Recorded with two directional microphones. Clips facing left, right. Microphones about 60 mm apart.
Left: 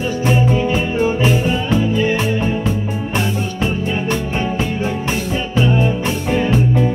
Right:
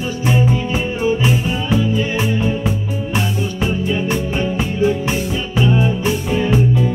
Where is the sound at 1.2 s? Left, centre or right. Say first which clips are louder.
Left 2 dB; centre.